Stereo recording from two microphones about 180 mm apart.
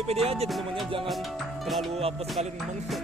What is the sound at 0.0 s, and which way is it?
Speech, 35° right (ahead or behind).